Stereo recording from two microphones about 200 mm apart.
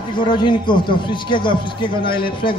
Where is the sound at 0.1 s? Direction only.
25° left (ahead or behind).